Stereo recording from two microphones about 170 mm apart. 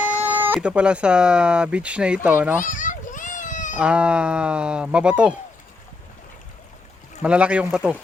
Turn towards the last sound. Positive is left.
turn(degrees=-5)  # may be behind; listen again after turning